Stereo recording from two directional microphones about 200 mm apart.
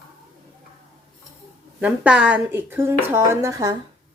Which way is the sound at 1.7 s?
5° right (ahead or behind).